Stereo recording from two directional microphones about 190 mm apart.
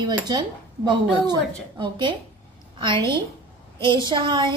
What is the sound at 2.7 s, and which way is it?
A woman's voice, 25° right (ahead or behind).